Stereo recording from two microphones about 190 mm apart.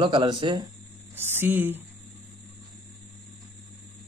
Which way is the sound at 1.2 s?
10° right (ahead or behind).